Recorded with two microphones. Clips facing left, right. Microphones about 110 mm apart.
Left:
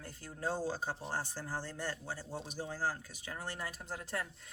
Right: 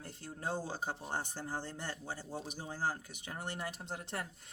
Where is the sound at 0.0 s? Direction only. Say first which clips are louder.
Left 2 dB; 25° right (ahead or behind).